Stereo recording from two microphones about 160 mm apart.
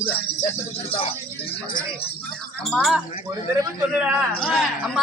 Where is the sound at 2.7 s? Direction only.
Centre (ahead or behind).